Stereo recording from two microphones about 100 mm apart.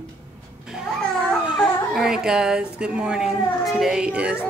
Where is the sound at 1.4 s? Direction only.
Centre (ahead or behind).